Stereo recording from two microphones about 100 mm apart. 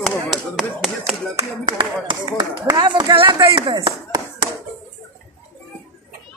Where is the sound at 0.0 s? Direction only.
Centre (ahead or behind).